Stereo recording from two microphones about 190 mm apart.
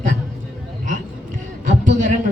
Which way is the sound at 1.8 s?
40° right (ahead or behind).